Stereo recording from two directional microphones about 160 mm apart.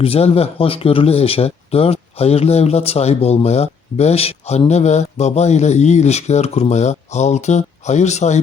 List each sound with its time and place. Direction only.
0.0 s speech: 40° left (ahead or behind)